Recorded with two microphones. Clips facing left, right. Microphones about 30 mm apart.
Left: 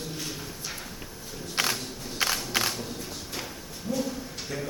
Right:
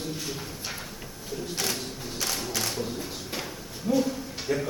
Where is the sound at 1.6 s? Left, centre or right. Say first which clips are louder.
Left 4 dB; left.